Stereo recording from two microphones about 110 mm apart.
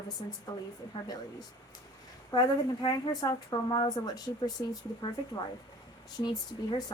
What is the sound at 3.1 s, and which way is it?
Speech, 35° left (ahead or behind).